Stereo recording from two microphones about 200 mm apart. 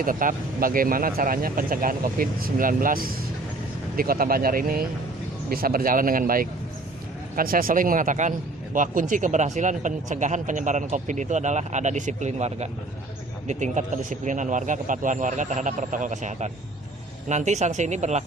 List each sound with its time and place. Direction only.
0.0 s speech: 40° right (ahead or behind)